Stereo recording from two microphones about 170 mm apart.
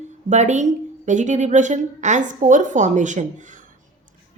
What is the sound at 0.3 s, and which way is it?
Speech, 45° right (ahead or behind).